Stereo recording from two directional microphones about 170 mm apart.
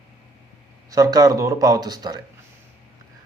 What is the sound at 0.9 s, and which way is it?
A man's voice, 20° right (ahead or behind).